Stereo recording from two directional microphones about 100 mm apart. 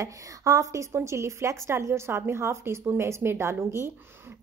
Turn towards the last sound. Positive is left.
turn(degrees=-25)  # may be behind; listen again after turning